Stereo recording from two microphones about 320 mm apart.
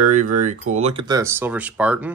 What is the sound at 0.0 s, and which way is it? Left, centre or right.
Speech, right.